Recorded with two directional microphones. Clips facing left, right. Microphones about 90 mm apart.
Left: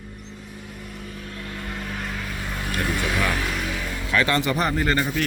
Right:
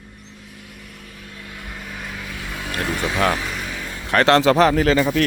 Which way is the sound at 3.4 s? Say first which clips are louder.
Left 1 dB; centre (ahead or behind).